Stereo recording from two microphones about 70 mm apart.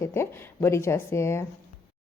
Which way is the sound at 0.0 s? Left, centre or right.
Left.